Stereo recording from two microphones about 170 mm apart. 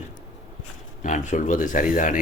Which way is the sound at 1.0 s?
45° left (ahead or behind).